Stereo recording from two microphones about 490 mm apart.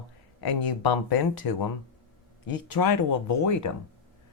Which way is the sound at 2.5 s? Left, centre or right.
Left.